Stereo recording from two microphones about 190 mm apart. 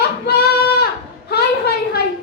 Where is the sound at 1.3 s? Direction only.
60° left (ahead or behind).